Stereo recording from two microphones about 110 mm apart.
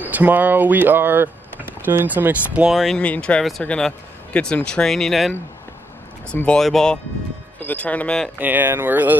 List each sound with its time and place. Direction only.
0.0 s speech: 15° right (ahead or behind)
2.7 s speech: centre (ahead or behind)
6.3 s speech: 10° left (ahead or behind)
8.4 s speech: 15° right (ahead or behind)